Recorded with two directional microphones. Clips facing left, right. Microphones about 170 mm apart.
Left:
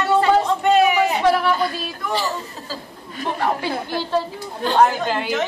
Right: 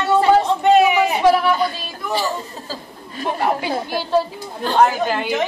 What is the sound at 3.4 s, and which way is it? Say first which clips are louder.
Speech: right 2 dB; 15° right (ahead or behind).